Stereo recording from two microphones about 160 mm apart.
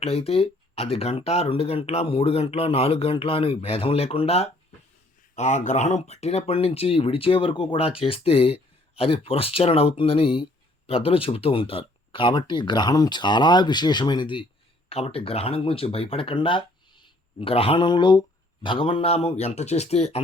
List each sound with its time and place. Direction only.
0.0 s speech: 40° left (ahead or behind)
5.3 s speech: 50° left (ahead or behind)